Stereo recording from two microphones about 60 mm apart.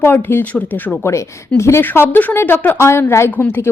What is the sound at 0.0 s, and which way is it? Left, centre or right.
Speech, left.